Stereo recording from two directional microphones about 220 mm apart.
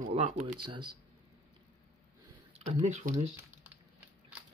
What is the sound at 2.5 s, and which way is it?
Speech, 30° right (ahead or behind).